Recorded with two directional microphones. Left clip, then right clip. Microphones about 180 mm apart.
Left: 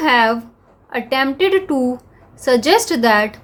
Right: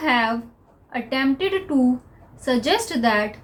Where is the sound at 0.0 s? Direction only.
50° left (ahead or behind).